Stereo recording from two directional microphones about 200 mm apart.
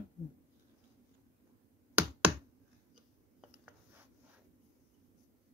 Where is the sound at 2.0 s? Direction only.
5° right (ahead or behind).